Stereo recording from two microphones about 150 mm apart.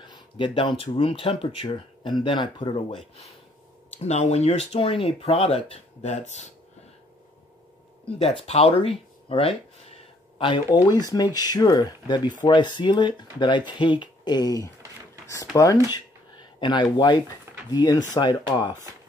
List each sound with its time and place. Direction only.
0.0 s a sound: 30° left (ahead or behind)
0.8 s speech: 35° left (ahead or behind)
4.0 s speech: 50° left (ahead or behind)
8.2 s speech: 45° left (ahead or behind)